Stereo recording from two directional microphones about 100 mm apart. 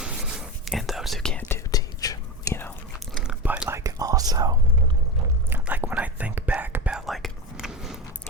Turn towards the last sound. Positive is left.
turn(degrees=-5)  # may be behind; listen again after turning